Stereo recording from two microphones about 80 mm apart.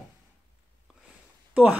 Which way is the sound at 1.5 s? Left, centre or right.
Centre.